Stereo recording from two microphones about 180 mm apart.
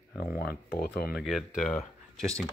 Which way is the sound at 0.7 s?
55° left (ahead or behind).